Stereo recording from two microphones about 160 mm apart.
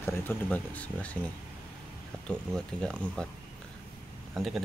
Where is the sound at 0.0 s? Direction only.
10° left (ahead or behind).